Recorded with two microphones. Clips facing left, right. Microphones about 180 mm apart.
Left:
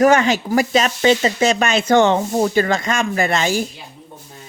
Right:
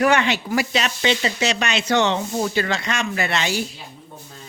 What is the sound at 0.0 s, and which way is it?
Speech, 45° left (ahead or behind).